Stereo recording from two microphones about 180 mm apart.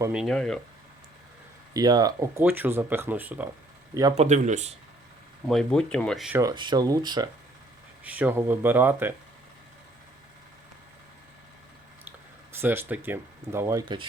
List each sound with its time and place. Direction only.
0.1 s speech: centre (ahead or behind)
1.7 s speech: 20° right (ahead or behind)
2.4 s speech: 10° right (ahead or behind)
4.1 s speech: 40° right (ahead or behind)
5.5 s speech: 5° left (ahead or behind)
6.5 s speech: 25° right (ahead or behind)
8.0 s speech: 10° right (ahead or behind)
12.5 s speech: 10° right (ahead or behind)
13.8 s speech: 25° right (ahead or behind)